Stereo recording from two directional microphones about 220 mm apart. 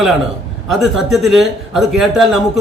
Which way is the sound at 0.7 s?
Centre (ahead or behind).